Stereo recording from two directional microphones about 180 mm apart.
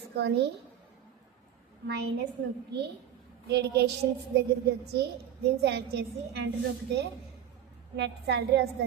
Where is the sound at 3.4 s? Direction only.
65° right (ahead or behind).